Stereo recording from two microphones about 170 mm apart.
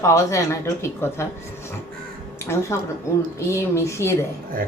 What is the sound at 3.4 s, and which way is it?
Speech, 15° left (ahead or behind).